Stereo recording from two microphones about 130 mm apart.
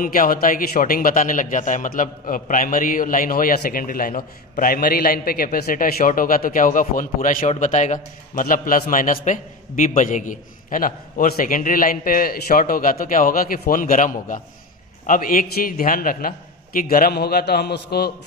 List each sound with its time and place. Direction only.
0.0 s speech: 90° left